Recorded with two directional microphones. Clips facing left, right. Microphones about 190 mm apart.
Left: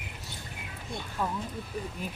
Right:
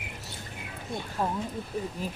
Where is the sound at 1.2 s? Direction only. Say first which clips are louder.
Right 2 dB; 35° right (ahead or behind).